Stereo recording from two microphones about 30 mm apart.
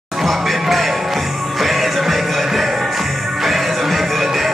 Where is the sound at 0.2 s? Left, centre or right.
Centre.